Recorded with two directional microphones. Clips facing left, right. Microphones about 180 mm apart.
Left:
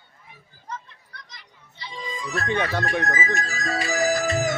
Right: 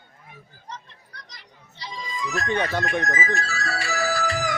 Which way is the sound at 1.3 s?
40° right (ahead or behind).